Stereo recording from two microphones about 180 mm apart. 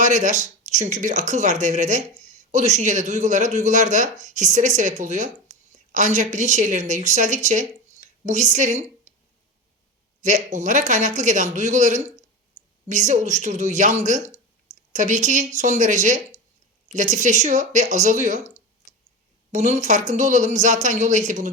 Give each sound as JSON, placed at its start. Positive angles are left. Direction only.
{"t": 0.0, "sound": "speech", "side_deg": -40}
{"t": 10.2, "sound": "speech", "side_deg": -40}